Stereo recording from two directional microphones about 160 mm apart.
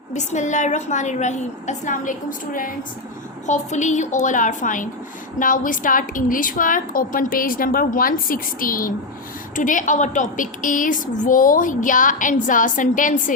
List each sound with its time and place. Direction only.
0.1 s a woman's voice: 50° left (ahead or behind)
3.4 s a woman's voice: 45° left (ahead or behind)